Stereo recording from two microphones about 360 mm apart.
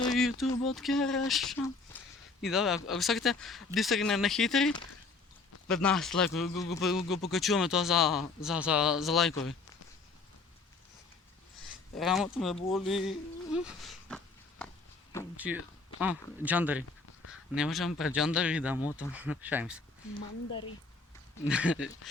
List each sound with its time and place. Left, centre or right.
0.1 s a sound: centre
0.5 s speech: centre
11.9 s speech: centre
15.4 s speech: centre
20.5 s a woman's voice: left
21.4 s speech: centre